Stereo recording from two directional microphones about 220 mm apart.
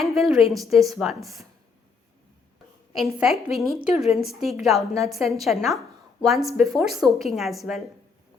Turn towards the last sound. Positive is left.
turn(degrees=0)  # may be behind; listen again after turning